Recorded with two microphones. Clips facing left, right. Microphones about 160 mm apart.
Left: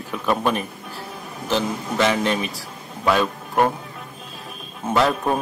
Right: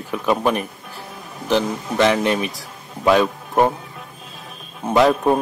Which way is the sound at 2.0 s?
10° right (ahead or behind).